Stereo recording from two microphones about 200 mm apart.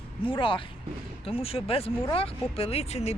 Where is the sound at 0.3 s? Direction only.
25° left (ahead or behind).